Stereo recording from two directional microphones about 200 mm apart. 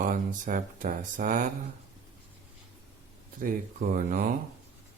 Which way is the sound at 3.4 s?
45° right (ahead or behind).